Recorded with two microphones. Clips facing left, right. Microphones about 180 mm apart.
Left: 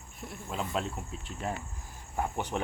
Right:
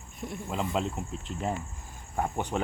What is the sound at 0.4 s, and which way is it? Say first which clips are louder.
Speech: right 3 dB; 20° right (ahead or behind).